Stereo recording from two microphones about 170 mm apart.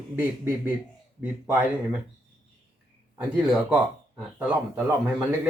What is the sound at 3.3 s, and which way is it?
Speech, 5° right (ahead or behind).